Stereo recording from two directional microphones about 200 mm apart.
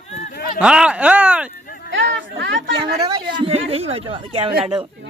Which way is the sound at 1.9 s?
65° right (ahead or behind).